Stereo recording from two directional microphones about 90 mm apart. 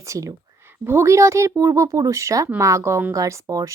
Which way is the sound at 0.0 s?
40° right (ahead or behind).